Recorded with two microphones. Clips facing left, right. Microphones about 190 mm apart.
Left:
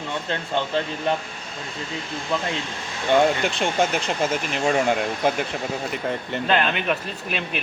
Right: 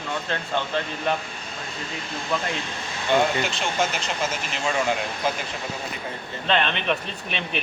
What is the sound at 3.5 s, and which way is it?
Speech, 55° left (ahead or behind).